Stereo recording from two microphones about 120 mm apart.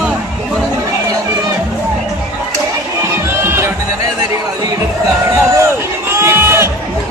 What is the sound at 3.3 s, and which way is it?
Music, 20° right (ahead or behind).